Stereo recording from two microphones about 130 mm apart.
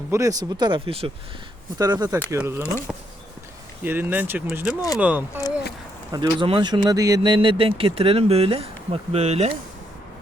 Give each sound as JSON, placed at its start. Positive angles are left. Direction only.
{"t": 0.1, "sound": "speech", "side_deg": -25}
{"t": 1.8, "sound": "speech", "side_deg": -30}
{"t": 2.4, "sound": "speech", "side_deg": -20}
{"t": 2.9, "sound": "speech", "side_deg": -5}
{"t": 4.7, "sound": "speech", "side_deg": 25}
{"t": 4.9, "sound": "speech", "side_deg": -10}
{"t": 6.1, "sound": "speech", "side_deg": -40}
{"t": 7.2, "sound": "speech", "side_deg": -40}